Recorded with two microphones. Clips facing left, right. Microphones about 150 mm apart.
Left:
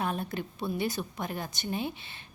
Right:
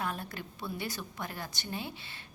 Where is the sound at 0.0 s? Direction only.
20° left (ahead or behind).